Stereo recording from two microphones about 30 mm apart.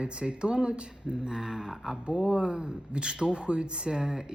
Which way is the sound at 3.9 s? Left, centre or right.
Centre.